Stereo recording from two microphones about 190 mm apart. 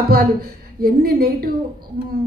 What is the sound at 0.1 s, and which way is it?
A woman's voice, 55° right (ahead or behind).